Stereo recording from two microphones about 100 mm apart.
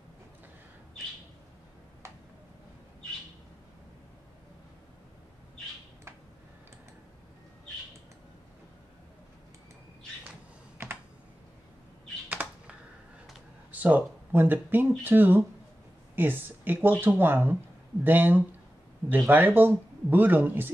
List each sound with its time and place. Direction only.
12.3 s computer keyboard: 15° right (ahead or behind)
13.7 s speech: 15° right (ahead or behind)